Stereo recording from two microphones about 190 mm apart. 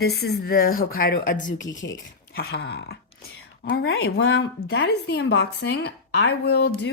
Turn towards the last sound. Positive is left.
turn(degrees=60)  # may be behind; listen again after turning